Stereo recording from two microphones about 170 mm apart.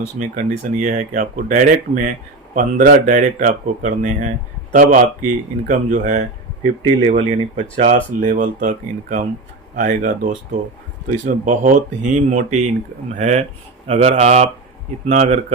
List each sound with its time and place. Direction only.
0.2 s speech: 45° right (ahead or behind)